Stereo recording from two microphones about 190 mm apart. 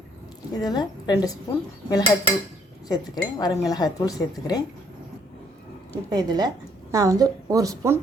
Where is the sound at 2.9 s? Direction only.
20° left (ahead or behind).